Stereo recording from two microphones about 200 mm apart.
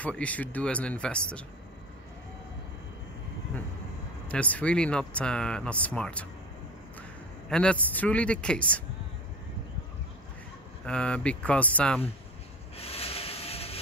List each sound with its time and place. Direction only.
0.0 s speech: 5° left (ahead or behind)
4.3 s a man's voice: 5° left (ahead or behind)
10.9 s speech: 5° left (ahead or behind)
12.7 s rub: 30° left (ahead or behind)